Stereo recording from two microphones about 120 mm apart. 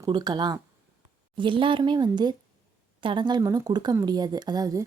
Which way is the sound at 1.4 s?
45° right (ahead or behind).